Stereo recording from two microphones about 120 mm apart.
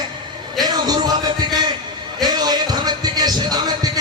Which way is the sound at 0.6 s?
35° right (ahead or behind).